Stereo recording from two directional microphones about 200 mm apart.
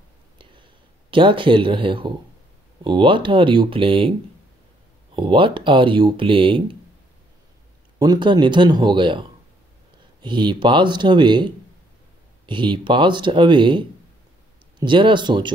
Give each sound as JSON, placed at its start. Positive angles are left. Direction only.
{"t": 1.1, "sound": "speech", "side_deg": -25}
{"t": 5.1, "sound": "speech", "side_deg": -25}
{"t": 8.0, "sound": "speech", "side_deg": -20}
{"t": 10.2, "sound": "speech", "side_deg": -25}